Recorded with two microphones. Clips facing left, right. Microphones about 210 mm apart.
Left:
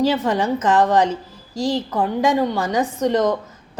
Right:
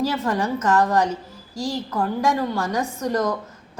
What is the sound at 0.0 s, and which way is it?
Speech, 20° left (ahead or behind).